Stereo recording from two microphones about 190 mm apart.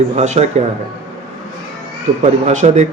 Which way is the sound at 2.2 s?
40° right (ahead or behind).